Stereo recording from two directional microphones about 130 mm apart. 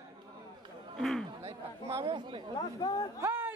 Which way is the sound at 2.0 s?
40° right (ahead or behind).